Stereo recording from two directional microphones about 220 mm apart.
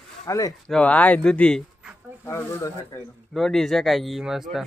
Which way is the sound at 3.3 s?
Centre (ahead or behind).